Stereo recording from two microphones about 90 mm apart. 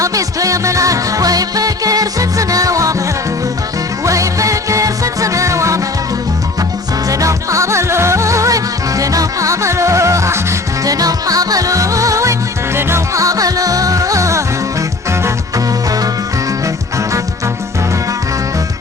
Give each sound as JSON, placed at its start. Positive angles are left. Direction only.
{"t": 0.0, "sound": "music", "side_deg": -40}
{"t": 4.0, "sound": "music", "side_deg": -35}
{"t": 7.1, "sound": "music", "side_deg": -35}